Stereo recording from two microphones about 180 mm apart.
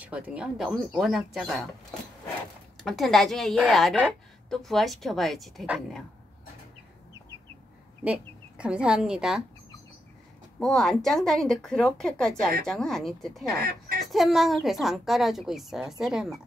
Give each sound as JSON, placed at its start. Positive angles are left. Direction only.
{"t": 0.0, "sound": "a woman's voice", "side_deg": -5}
{"t": 2.8, "sound": "a woman's voice", "side_deg": 0}
{"t": 8.0, "sound": "a woman's voice", "side_deg": -5}
{"t": 10.6, "sound": "a woman's voice", "side_deg": 0}
{"t": 13.6, "sound": "speech", "side_deg": -60}
{"t": 14.0, "sound": "a woman's voice", "side_deg": 0}